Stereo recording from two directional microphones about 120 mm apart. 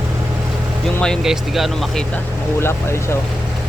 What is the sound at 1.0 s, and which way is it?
Speech, centre (ahead or behind).